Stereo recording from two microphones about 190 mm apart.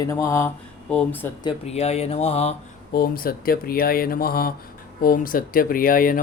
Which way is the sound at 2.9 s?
50° left (ahead or behind).